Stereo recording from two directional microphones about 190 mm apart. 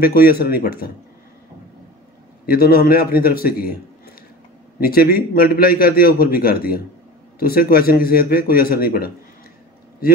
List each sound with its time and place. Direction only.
0.0 s a man's voice: 50° left (ahead or behind)
2.5 s a man's voice: 55° left (ahead or behind)